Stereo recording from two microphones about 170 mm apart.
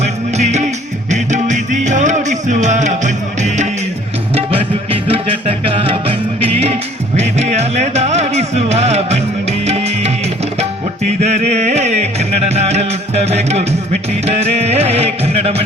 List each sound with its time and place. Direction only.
0.0 s music: 40° right (ahead or behind)
4.4 s music: 35° right (ahead or behind)
11.2 s music: 40° right (ahead or behind)